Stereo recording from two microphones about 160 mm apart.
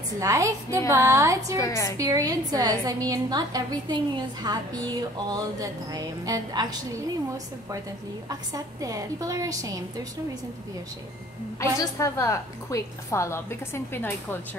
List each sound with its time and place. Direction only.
0.2 s a woman's voice: 20° right (ahead or behind)
1.6 s a woman's voice: 20° left (ahead or behind)
2.0 s a woman's voice: 20° right (ahead or behind)
8.3 s a woman's voice: 20° right (ahead or behind)
11.6 s a woman's voice: 20° left (ahead or behind)